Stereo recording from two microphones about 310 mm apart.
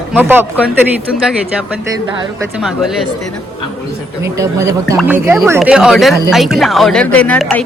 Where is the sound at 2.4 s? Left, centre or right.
Centre.